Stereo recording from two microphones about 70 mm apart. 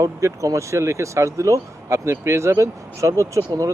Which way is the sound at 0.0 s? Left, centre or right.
Right.